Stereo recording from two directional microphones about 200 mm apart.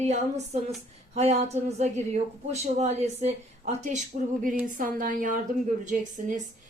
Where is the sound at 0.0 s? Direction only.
35° right (ahead or behind).